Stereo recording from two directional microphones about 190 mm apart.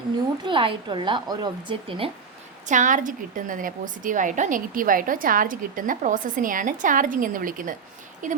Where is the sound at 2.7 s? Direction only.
40° right (ahead or behind).